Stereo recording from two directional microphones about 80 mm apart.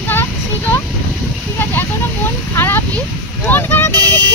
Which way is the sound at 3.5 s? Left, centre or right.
Left.